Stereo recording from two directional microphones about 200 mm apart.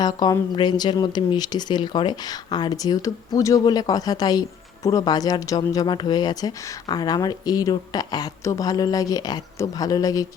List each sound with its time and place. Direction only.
0.0 s speech: 20° left (ahead or behind)